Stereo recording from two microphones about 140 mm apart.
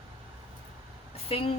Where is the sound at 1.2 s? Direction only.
40° left (ahead or behind).